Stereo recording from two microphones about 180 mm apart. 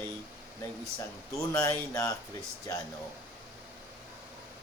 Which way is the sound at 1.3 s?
15° left (ahead or behind).